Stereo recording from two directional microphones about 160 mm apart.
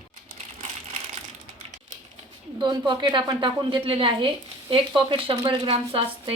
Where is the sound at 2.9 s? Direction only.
30° right (ahead or behind).